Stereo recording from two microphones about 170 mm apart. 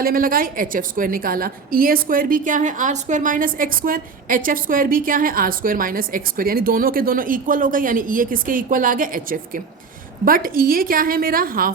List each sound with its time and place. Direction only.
0.0 s a woman's voice: 60° right (ahead or behind)